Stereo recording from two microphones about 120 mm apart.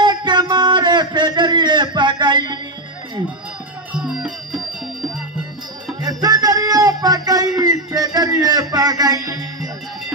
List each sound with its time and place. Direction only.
0.0 s a sound: 40° right (ahead or behind)
3.9 s music: 5° right (ahead or behind)
5.9 s music: 30° right (ahead or behind)